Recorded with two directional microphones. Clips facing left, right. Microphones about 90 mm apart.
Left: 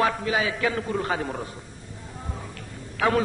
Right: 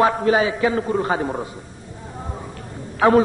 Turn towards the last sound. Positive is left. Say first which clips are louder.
# right 8 dB
turn(degrees=-30)  # may be behind; listen again after turning